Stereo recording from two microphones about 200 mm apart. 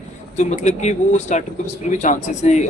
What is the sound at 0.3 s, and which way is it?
Speech, 35° left (ahead or behind).